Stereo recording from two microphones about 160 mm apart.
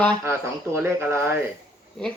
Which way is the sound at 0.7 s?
15° right (ahead or behind).